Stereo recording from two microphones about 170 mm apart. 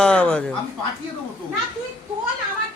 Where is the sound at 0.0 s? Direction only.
5° left (ahead or behind).